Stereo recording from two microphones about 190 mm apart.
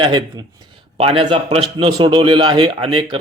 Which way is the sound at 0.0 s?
25° right (ahead or behind).